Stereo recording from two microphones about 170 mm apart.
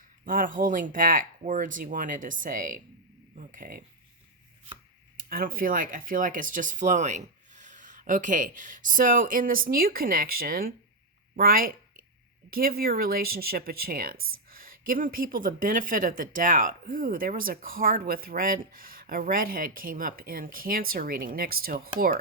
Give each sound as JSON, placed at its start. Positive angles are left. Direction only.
{"t": 0.3, "sound": "speech", "side_deg": -55}
{"t": 5.1, "sound": "speech", "side_deg": -55}